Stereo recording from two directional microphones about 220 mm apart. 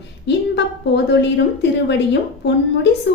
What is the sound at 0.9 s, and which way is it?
Speech, 50° left (ahead or behind).